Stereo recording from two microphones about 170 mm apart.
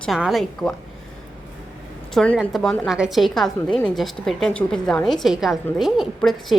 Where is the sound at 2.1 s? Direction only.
5° left (ahead or behind).